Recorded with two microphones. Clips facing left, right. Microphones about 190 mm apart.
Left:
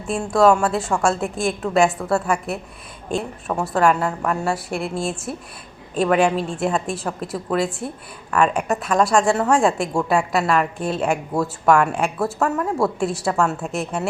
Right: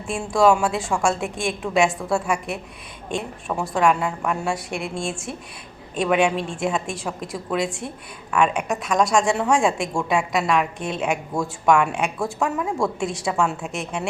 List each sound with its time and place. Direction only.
0.1 s a woman's voice: centre (ahead or behind)